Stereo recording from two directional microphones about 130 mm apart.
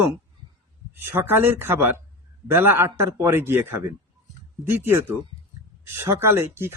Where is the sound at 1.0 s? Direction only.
15° right (ahead or behind).